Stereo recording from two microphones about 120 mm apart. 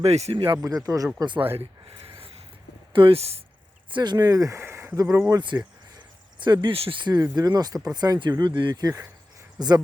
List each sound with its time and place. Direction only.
0.0 s speech: 60° right (ahead or behind)
0.3 s speech: 35° right (ahead or behind)
2.0 s a sound: 50° right (ahead or behind)
2.9 s speech: 50° right (ahead or behind)
3.8 s speech: 40° right (ahead or behind); by 5.4 s 25° right (ahead or behind)
5.4 s speech: 40° right (ahead or behind)